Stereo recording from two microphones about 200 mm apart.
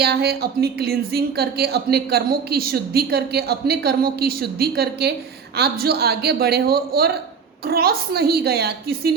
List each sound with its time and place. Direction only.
0.0 s speech: 55° right (ahead or behind)